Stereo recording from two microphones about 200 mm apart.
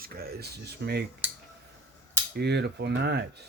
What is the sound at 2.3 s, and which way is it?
Speech, 55° right (ahead or behind).